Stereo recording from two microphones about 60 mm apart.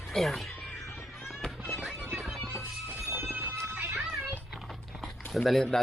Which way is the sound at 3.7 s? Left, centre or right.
Right.